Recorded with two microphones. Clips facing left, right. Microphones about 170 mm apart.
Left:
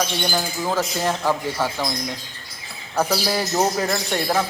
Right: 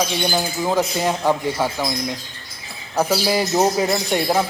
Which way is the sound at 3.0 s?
10° right (ahead or behind).